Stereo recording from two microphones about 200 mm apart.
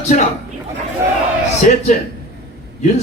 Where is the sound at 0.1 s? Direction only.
40° left (ahead or behind).